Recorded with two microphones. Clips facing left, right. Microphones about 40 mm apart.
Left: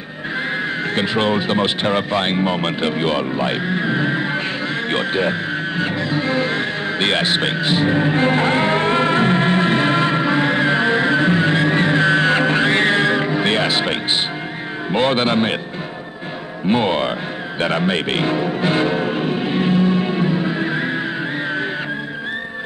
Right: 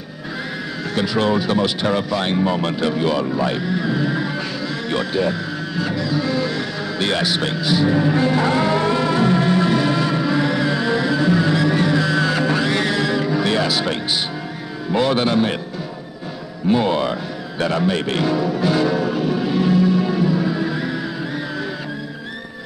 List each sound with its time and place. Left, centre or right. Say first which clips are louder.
0.9 s speech: right 1 dB; left
5.8 s music: right 2 dB; left
14.9 s speech: left 1 dB; left
16.6 s speech: even; left
17.6 s music: even; left